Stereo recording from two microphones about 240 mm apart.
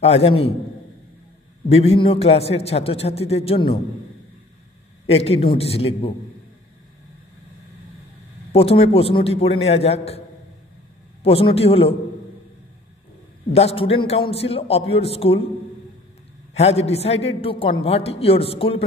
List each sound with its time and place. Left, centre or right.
0.0 s a woman's voice: left
1.7 s a woman's voice: left
5.1 s a woman's voice: left
8.5 s a woman's voice: left
11.2 s a woman's voice: left
13.5 s a woman's voice: left
16.5 s a woman's voice: left